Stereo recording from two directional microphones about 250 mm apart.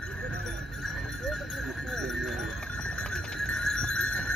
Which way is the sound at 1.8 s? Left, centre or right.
Centre.